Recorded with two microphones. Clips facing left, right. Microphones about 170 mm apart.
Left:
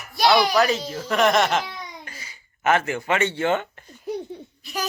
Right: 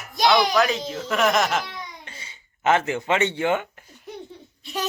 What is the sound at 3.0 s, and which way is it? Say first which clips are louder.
Speech: even; 20° right (ahead or behind).